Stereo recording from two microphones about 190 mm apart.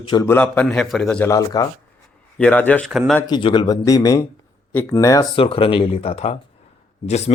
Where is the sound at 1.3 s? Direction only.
20° left (ahead or behind).